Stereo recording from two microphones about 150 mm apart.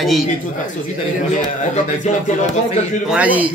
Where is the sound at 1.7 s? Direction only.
50° left (ahead or behind).